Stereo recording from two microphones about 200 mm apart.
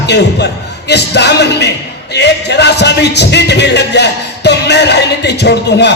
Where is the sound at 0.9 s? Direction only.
55° left (ahead or behind).